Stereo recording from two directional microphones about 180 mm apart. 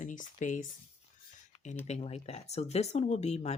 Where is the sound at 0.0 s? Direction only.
45° left (ahead or behind).